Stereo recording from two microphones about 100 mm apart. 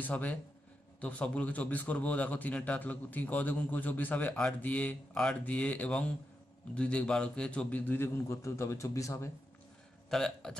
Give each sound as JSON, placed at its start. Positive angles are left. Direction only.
{"t": 0.0, "sound": "a man's voice", "side_deg": 15}
{"t": 10.0, "sound": "a man's voice", "side_deg": 5}